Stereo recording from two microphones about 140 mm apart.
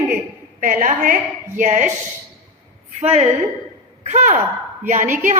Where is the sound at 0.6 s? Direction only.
75° right (ahead or behind).